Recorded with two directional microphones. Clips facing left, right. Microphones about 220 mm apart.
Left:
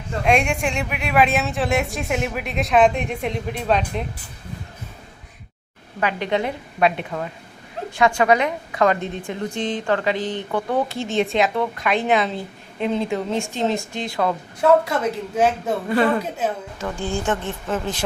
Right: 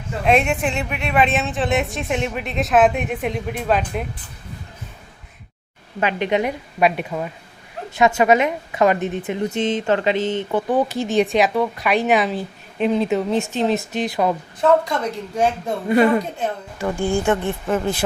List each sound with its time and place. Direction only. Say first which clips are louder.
0.3 s speech: right 2 dB; 5° right (ahead or behind)
6.0 s a woman's voice: right 2 dB; 20° right (ahead or behind)
14.6 s speech: left 1 dB; 5° left (ahead or behind)
15.9 s a woman's voice: right 5 dB; 20° right (ahead or behind)